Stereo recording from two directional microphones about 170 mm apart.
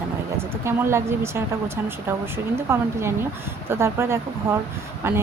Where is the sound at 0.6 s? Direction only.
15° right (ahead or behind).